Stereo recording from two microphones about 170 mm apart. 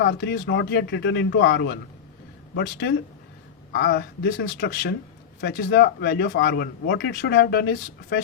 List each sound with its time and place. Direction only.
0.0 s speech: 75° left (ahead or behind)
3.7 s speech: 65° left (ahead or behind)
5.4 s speech: 90° left; by 8.2 s 70° left (ahead or behind)